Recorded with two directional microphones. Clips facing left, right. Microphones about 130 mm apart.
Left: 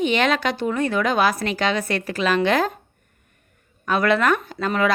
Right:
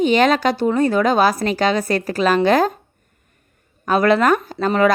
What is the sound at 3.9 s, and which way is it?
Speech, 35° right (ahead or behind).